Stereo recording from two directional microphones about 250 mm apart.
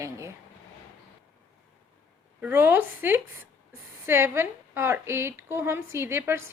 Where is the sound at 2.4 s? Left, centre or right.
Centre.